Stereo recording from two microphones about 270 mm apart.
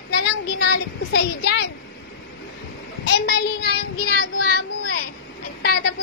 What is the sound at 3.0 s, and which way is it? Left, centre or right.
Speech, left.